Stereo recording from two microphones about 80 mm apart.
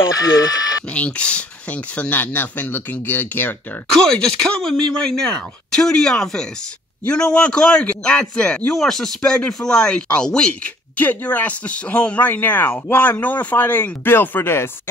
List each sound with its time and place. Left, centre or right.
0.1 s speech: left
0.9 s speech: centre
3.9 s a man's voice: centre; by 14.7 s left